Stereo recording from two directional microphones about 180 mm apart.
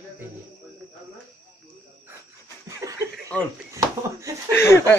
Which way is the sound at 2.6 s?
15° right (ahead or behind).